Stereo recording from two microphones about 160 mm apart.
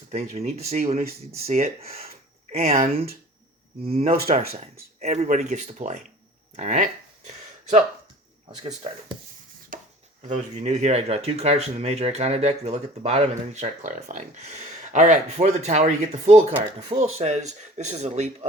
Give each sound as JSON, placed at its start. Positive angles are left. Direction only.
{"t": 0.1, "sound": "speech", "side_deg": -45}
{"t": 1.9, "sound": "a sound", "side_deg": -40}
{"t": 3.8, "sound": "speech", "side_deg": -40}
{"t": 6.6, "sound": "a sound", "side_deg": -50}
{"t": 8.6, "sound": "speech", "side_deg": -40}
{"t": 9.7, "sound": "chopping", "side_deg": -60}
{"t": 10.2, "sound": "speech", "side_deg": -45}